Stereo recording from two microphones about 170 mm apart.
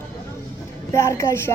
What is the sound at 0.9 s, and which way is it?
Speech, 15° left (ahead or behind).